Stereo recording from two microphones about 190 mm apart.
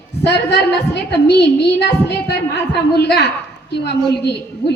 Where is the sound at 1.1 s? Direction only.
60° left (ahead or behind).